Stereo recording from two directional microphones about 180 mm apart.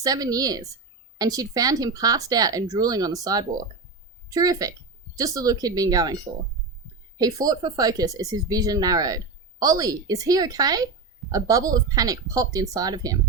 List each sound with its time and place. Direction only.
0.0 s speech: 20° right (ahead or behind)
7.2 s speech: 20° right (ahead or behind)